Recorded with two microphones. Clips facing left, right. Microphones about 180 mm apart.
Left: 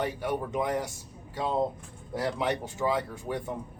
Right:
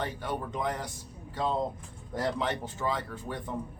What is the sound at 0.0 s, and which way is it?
Speech, 10° left (ahead or behind).